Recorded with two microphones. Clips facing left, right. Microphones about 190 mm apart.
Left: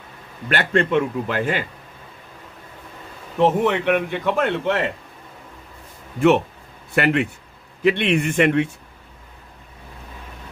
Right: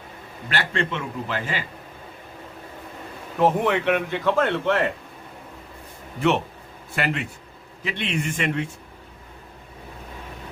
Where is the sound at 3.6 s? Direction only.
15° left (ahead or behind).